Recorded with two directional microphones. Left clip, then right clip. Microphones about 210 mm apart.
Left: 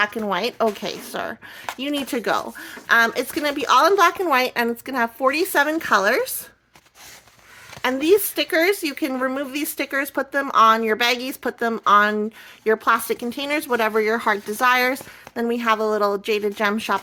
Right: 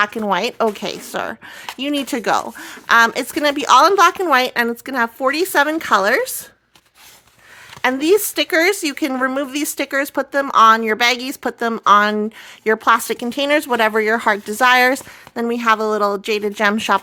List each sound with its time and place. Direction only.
0.0 s speech: 30° right (ahead or behind)
7.8 s speech: 30° right (ahead or behind)